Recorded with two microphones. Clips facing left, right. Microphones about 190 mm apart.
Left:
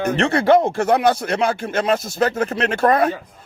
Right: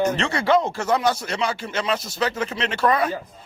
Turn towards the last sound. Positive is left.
turn(degrees=50)  # may be behind; listen again after turning